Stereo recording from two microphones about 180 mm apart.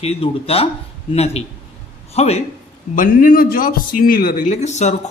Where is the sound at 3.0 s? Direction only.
50° left (ahead or behind).